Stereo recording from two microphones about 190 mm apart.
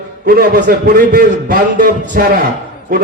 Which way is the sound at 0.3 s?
50° right (ahead or behind).